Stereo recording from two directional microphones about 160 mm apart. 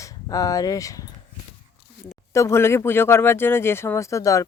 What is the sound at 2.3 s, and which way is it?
Speech, 15° left (ahead or behind).